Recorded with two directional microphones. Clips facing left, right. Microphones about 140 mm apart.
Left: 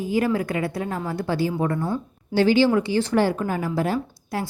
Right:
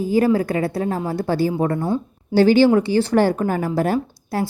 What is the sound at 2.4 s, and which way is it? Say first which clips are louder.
A woman's voice: right 4 dB; 45° right (ahead or behind).